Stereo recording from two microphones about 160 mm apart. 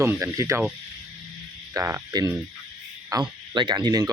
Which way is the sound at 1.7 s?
20° right (ahead or behind).